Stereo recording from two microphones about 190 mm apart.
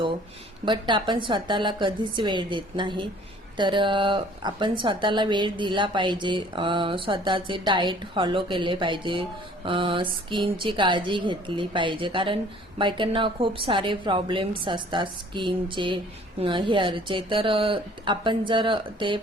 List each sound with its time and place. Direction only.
0.6 s a woman's voice: 25° right (ahead or behind)